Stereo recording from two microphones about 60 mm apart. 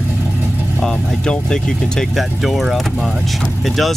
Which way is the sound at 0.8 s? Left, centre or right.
Centre.